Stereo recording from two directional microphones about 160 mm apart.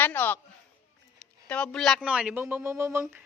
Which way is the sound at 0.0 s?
10° left (ahead or behind).